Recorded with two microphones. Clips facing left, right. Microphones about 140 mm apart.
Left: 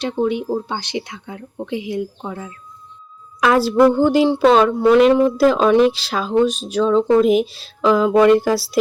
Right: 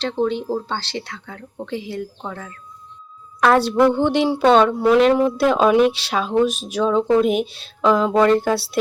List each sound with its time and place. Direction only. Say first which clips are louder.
0.0 s speech: left 1 dB; 10° left (ahead or behind)